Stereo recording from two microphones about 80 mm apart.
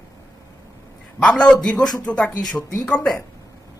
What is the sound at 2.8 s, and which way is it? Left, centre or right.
Speech, centre.